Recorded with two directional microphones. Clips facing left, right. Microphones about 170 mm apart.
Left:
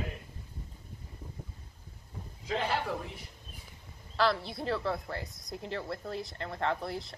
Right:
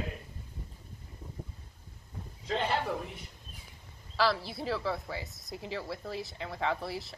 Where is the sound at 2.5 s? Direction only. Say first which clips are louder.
Right 1 dB; 5° left (ahead or behind).